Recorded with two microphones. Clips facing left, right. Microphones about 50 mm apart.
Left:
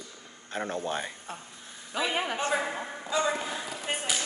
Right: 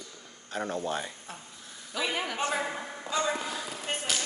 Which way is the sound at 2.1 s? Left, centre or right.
Left.